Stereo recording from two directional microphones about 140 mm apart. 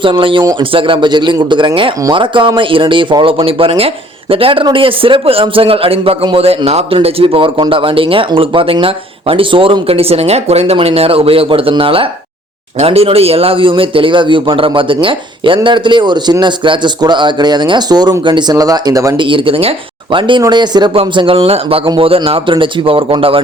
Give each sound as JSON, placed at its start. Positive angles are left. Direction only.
{"t": 0.0, "sound": "speech", "side_deg": -35}